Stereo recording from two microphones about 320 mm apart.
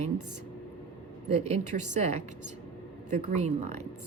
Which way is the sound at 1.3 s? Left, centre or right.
Centre.